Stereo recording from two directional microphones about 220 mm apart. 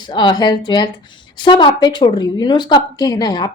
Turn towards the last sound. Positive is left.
turn(degrees=20)  # may be behind; listen again after turning